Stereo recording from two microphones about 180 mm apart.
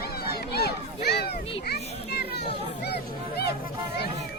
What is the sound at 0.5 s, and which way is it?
Children playing, 65° left (ahead or behind).